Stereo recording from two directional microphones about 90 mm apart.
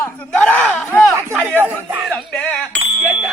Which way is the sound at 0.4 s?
15° left (ahead or behind).